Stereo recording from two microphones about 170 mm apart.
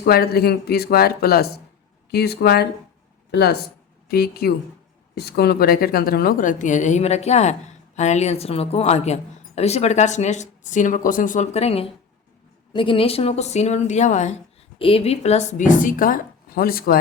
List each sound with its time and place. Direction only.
0.0 s speech: 65° left (ahead or behind)
2.0 s a woman's voice: 75° left (ahead or behind); by 14.3 s 45° left (ahead or behind)
14.8 s a woman's voice: 35° left (ahead or behind); by 17.0 s 60° left (ahead or behind)